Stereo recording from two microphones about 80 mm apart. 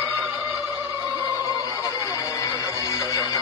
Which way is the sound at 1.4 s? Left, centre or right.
Left.